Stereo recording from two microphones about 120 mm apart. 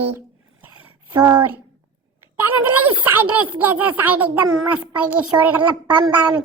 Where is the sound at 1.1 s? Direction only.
35° right (ahead or behind).